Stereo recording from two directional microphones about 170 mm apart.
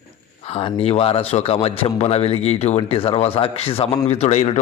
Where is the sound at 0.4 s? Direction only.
35° left (ahead or behind).